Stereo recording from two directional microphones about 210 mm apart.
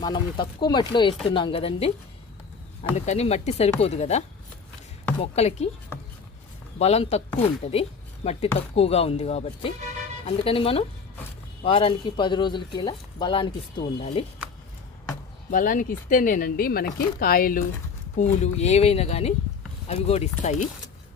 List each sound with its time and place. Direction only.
0.0 s speech: 20° left (ahead or behind)
2.9 s speech: 30° left (ahead or behind)
5.2 s speech: 30° left (ahead or behind)
6.7 s speech: 30° left (ahead or behind)
15.5 s speech: 40° left (ahead or behind)
18.2 s speech: 30° left (ahead or behind)